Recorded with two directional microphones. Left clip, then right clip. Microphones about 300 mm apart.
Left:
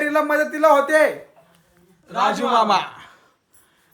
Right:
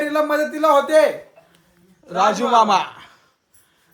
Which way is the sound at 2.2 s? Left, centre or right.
Centre.